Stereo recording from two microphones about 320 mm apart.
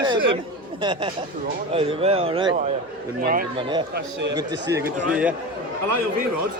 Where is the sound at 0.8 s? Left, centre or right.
Centre.